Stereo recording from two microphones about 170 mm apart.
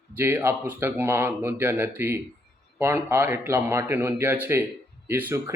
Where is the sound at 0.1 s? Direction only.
10° right (ahead or behind).